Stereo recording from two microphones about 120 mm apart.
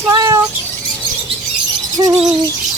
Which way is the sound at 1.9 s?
25° right (ahead or behind).